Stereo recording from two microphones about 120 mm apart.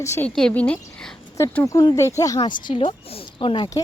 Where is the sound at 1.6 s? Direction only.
30° left (ahead or behind).